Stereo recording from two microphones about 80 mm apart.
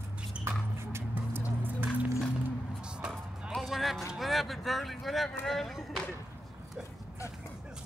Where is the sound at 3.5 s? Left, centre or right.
Centre.